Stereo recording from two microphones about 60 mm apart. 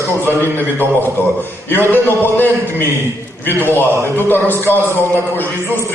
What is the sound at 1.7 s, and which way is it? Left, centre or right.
A man's voice, left.